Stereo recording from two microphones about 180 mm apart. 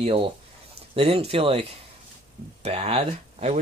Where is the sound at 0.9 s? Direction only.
35° right (ahead or behind).